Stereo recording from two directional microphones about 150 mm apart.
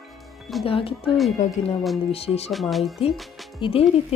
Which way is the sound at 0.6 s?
35° left (ahead or behind).